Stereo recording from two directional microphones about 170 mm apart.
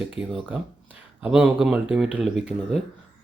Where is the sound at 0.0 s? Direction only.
5° right (ahead or behind).